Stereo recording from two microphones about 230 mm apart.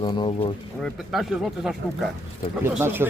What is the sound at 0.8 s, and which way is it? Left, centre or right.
Speech, centre.